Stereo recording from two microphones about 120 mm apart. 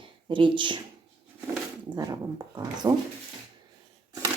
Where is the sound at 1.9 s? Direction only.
35° right (ahead or behind).